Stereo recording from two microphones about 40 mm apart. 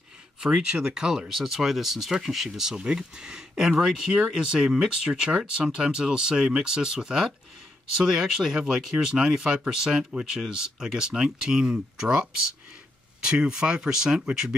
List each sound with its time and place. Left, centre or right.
0.4 s speech: centre
2.8 s speech: right